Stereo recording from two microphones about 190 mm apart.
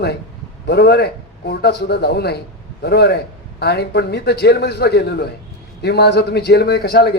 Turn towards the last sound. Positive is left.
turn(degrees=60)  # may be behind; listen again after turning